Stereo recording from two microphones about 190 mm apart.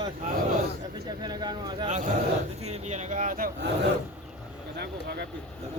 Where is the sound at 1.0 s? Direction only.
20° right (ahead or behind).